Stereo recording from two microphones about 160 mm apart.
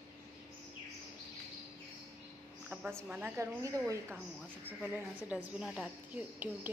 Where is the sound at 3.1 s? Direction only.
15° right (ahead or behind).